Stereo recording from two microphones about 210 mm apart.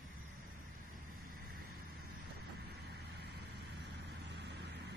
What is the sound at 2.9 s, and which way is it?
Vehicle, 50° right (ahead or behind).